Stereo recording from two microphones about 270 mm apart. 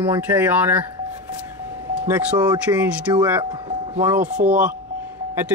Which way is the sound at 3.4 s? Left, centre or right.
Centre.